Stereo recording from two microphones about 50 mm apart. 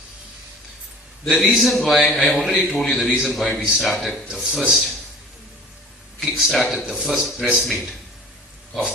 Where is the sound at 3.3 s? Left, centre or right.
Centre.